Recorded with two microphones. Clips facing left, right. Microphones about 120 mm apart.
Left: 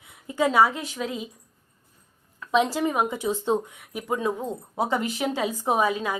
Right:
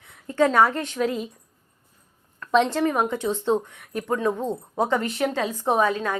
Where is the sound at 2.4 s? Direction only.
5° left (ahead or behind).